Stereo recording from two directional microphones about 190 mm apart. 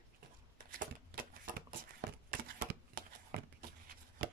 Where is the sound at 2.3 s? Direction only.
45° right (ahead or behind).